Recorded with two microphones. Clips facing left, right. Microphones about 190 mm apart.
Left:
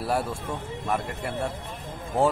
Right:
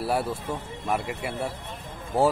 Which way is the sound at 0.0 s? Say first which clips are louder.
Right 1 dB; centre (ahead or behind).